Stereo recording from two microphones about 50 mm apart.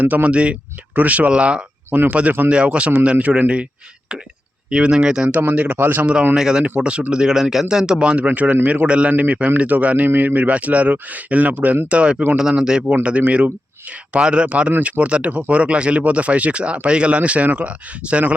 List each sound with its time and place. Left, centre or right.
0.0 s speech: right
4.7 s a man's voice: centre
5.4 s speech: right
6.0 s a man's voice: right
13.0 s speech: right